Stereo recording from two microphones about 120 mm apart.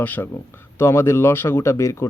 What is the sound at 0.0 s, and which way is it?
Speech, 15° left (ahead or behind).